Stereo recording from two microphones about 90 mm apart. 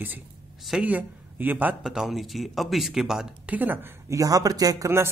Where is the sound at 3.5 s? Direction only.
20° right (ahead or behind).